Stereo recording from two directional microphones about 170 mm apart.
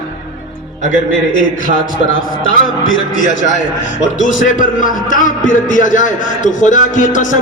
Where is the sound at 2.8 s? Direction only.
50° left (ahead or behind).